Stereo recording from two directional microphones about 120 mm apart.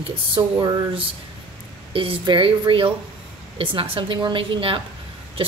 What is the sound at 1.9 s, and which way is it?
Speech, 45° right (ahead or behind).